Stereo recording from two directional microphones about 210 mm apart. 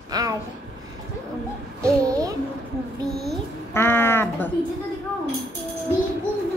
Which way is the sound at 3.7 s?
10° left (ahead or behind).